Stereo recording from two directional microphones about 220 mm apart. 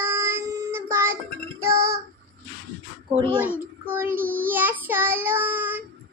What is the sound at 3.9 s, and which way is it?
Child singing, 10° right (ahead or behind).